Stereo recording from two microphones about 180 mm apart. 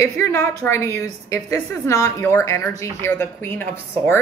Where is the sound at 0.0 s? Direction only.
15° left (ahead or behind).